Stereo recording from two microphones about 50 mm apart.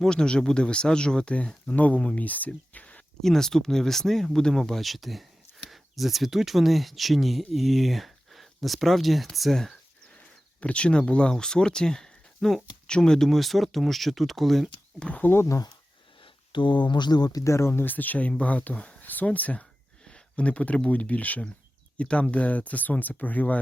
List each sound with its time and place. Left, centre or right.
0.0 s speech: centre
2.2 s a sound: left
3.2 s speech: centre
10.6 s speech: left; by 14.7 s centre
14.9 s speech: left
15.2 s speech: left
17.4 s speech: left
17.8 s speech: left
20.1 s speech: centre